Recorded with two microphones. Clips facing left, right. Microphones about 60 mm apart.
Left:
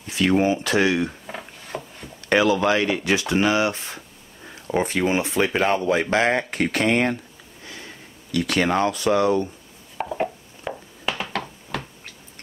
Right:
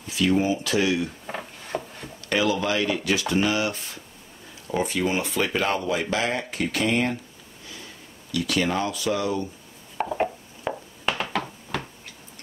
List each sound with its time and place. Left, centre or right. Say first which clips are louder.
0.0 s speech: left 3 dB; left
1.2 s wood: right 1 dB; centre
2.2 s speech: left 5 dB; left
3.0 s speech: left 2 dB; left
5.9 s speech: left 5 dB; left
8.3 s speech: left 3 dB; left
9.9 s a sound: even; centre